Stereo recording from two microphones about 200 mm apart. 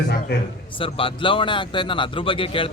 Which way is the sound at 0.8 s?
25° left (ahead or behind).